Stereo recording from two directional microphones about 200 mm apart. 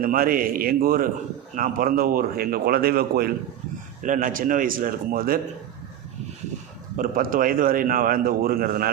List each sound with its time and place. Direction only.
0.0 s a man's voice: 45° right (ahead or behind)
6.9 s a man's voice: 45° right (ahead or behind)